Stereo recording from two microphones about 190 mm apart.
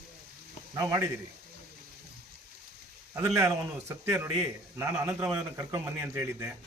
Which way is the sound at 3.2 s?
15° right (ahead or behind).